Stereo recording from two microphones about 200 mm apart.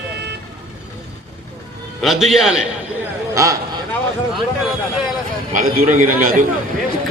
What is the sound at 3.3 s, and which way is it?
Speech, 15° right (ahead or behind).